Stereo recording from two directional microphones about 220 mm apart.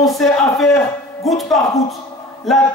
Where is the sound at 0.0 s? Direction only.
Centre (ahead or behind).